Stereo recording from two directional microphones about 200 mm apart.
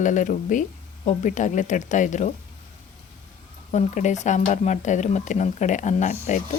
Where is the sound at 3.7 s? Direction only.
35° left (ahead or behind).